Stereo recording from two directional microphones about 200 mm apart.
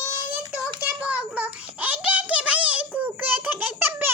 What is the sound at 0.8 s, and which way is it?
Child singing, 10° right (ahead or behind).